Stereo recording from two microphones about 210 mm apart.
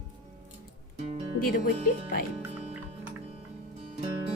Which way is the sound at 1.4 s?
40° left (ahead or behind).